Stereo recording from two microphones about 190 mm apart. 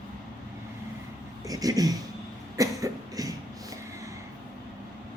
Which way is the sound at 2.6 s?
15° right (ahead or behind).